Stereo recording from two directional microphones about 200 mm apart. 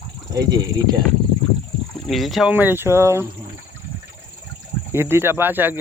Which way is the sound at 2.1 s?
Centre (ahead or behind).